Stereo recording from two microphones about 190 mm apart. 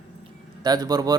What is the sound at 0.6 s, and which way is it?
Speech, 20° right (ahead or behind).